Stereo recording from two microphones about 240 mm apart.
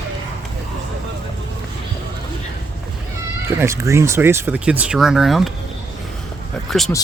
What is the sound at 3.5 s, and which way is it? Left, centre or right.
Speech, centre.